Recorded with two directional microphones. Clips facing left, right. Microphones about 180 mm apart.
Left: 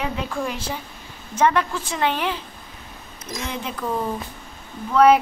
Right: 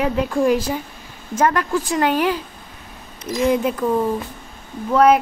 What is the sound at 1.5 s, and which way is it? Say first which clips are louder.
Speech: right 4 dB; 45° right (ahead or behind).